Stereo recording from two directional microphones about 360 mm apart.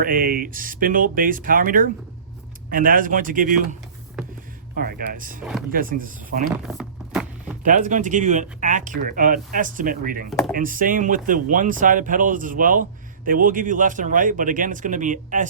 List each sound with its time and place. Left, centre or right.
0.0 s speech: right
6.5 s a sound: centre
7.6 s speech: right
10.2 s speech: centre
10.5 s speech: right